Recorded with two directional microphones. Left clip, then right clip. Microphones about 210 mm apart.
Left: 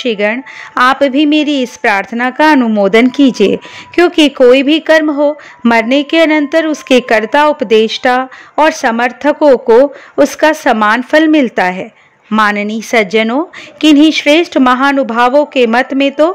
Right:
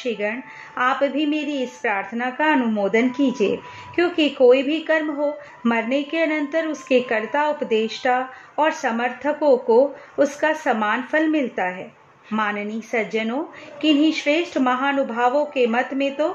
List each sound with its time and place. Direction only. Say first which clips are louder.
0.0 s a woman's voice: left 12 dB; 50° left (ahead or behind)